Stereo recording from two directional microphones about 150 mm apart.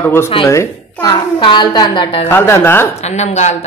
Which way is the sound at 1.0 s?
30° left (ahead or behind).